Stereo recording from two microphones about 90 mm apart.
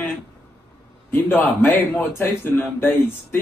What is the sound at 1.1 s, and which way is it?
A man's voice, 20° left (ahead or behind).